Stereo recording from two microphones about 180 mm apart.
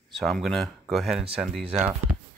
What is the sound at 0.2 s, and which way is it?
Speech, centre (ahead or behind).